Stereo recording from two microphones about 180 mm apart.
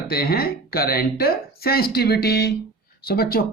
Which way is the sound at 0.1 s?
60° left (ahead or behind).